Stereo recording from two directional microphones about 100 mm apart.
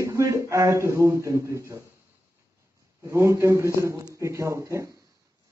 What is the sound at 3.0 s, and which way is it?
A woman's voice, 30° right (ahead or behind).